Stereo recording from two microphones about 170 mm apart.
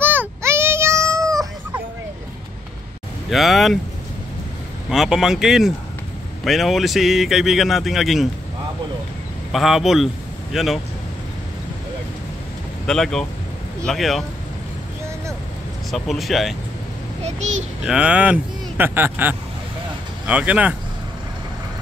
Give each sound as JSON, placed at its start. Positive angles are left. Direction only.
{"t": 0.0, "sound": "baby cry", "side_deg": -10}
{"t": 3.3, "sound": "a man's voice", "side_deg": 0}
{"t": 4.8, "sound": "a man's voice", "side_deg": 0}
{"t": 9.5, "sound": "a man's voice", "side_deg": 0}
{"t": 12.8, "sound": "a man's voice", "side_deg": 5}
{"t": 15.9, "sound": "a man's voice", "side_deg": 0}
{"t": 17.8, "sound": "speech", "side_deg": -5}